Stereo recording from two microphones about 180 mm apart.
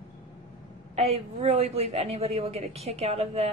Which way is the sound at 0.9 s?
35° right (ahead or behind).